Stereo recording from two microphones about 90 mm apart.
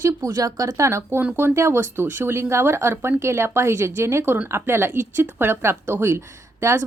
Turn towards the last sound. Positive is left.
turn(degrees=-30)  # may be behind; listen again after turning